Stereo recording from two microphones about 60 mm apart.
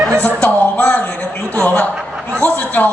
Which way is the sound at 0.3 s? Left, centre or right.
Left.